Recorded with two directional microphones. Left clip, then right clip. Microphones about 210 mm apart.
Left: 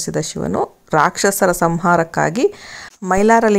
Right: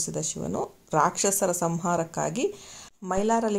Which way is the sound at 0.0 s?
25° left (ahead or behind).